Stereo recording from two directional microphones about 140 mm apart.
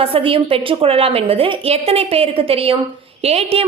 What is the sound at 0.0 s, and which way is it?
A woman's voice, 40° right (ahead or behind).